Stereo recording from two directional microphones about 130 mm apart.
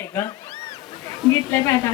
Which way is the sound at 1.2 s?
5° right (ahead or behind).